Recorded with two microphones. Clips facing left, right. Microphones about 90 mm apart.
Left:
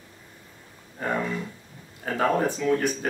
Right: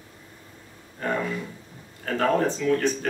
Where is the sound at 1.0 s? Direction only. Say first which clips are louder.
Even; 10° left (ahead or behind).